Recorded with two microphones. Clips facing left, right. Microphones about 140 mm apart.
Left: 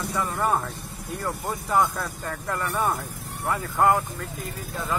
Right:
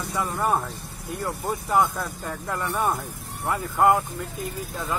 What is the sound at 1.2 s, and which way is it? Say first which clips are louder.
Speech: right 1 dB; 15° right (ahead or behind).